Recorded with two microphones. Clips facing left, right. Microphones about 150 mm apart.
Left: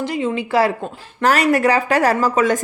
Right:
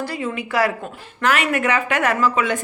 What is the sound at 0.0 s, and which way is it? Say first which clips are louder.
Speech: left 5 dB; 20° left (ahead or behind).